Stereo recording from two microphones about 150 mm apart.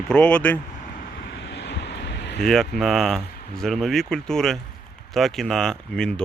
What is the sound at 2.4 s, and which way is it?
Speech, centre (ahead or behind).